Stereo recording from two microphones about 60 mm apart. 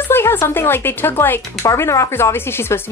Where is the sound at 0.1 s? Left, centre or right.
Left.